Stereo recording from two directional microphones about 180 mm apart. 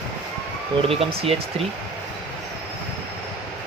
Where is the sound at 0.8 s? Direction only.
30° right (ahead or behind).